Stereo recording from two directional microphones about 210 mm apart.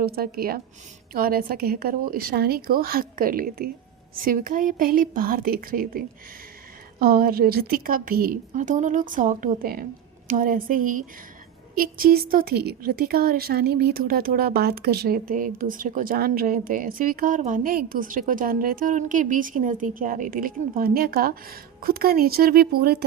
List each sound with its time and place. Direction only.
0.0 s a woman's voice: 45° right (ahead or behind)
7.0 s a woman's voice: 45° right (ahead or behind)